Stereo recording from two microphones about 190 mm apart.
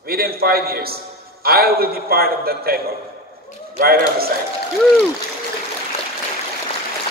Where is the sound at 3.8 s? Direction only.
50° right (ahead or behind).